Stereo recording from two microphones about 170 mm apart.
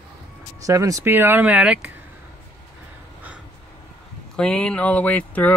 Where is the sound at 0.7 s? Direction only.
20° right (ahead or behind).